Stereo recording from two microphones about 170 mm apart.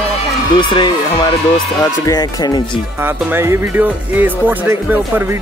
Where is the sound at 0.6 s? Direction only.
25° left (ahead or behind).